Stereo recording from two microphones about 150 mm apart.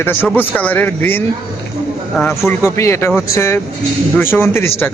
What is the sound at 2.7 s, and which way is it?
A man's voice, 20° left (ahead or behind).